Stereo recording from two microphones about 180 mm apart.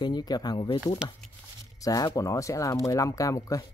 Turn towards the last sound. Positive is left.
turn(degrees=20)  # may be behind; listen again after turning